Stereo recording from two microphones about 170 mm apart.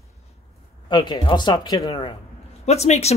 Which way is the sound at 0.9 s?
25° left (ahead or behind).